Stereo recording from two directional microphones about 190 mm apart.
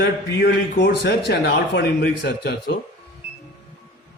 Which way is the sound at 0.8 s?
60° left (ahead or behind).